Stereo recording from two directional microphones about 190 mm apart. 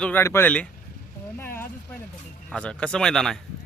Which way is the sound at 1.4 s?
10° left (ahead or behind).